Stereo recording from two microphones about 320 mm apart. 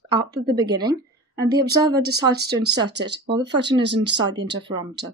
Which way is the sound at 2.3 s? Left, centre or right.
Right.